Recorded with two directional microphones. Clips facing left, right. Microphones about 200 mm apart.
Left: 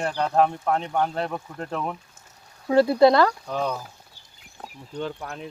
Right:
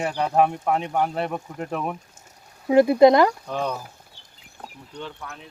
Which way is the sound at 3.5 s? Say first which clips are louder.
Even; centre (ahead or behind).